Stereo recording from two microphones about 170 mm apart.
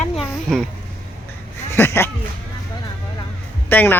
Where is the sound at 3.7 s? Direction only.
10° left (ahead or behind).